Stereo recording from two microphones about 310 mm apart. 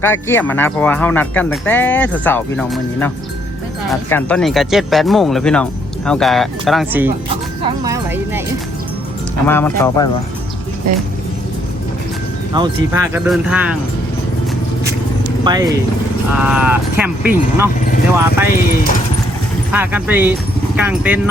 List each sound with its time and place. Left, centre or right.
0.0 s speech: centre
7.9 s music: centre
9.5 s speech: centre
12.5 s speech: centre
15.4 s speech: centre
18.4 s speech: left
19.7 s speech: centre